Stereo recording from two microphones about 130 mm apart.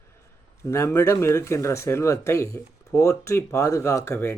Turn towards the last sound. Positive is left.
turn(degrees=20)  # may be behind; listen again after turning